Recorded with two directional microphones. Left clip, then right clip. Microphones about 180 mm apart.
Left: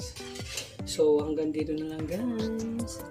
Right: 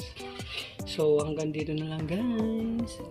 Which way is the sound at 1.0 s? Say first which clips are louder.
Left 2 dB; 40° right (ahead or behind).